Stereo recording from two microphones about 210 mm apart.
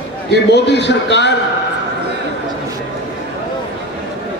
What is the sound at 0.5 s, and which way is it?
Speech, 55° left (ahead or behind).